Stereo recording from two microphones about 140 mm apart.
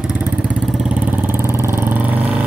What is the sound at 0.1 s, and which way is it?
Vehicle, 10° right (ahead or behind).